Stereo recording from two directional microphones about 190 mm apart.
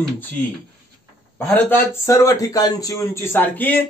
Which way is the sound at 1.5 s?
10° left (ahead or behind).